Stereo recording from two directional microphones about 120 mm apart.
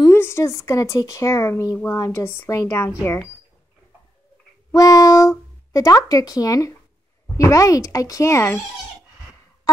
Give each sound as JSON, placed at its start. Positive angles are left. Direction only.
{"t": 0.0, "sound": "speech", "side_deg": 20}
{"t": 4.7, "sound": "speech", "side_deg": 30}